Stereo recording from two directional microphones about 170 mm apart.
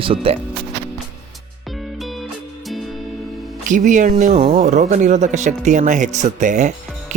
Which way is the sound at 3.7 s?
45° right (ahead or behind).